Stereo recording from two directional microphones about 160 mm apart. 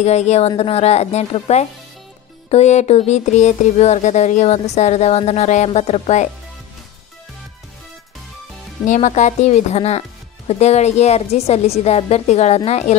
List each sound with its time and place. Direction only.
0.0 s speech: 45° left (ahead or behind)
8.8 s a woman's voice: 50° left (ahead or behind)